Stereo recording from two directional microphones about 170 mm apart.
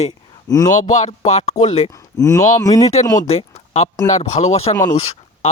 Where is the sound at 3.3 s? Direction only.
40° left (ahead or behind).